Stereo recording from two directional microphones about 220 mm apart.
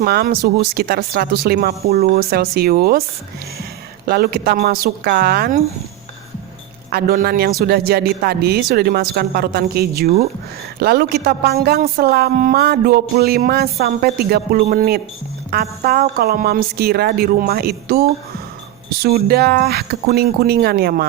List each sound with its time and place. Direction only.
0.0 s a woman's voice: 45° right (ahead or behind)
4.0 s a woman's voice: 45° right (ahead or behind)
6.9 s a woman's voice: 45° right (ahead or behind)